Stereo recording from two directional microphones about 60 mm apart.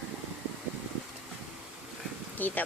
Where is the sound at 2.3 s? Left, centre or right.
Left.